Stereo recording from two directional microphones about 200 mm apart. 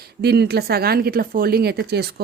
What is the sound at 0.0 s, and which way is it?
Speech, 55° right (ahead or behind).